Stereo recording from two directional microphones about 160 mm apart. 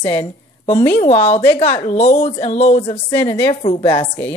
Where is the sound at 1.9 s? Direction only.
45° left (ahead or behind).